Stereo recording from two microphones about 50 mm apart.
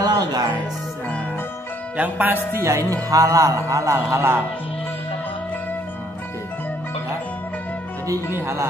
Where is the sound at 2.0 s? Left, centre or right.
Right.